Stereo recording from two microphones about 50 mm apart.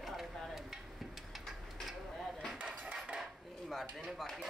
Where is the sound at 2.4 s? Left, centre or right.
Centre.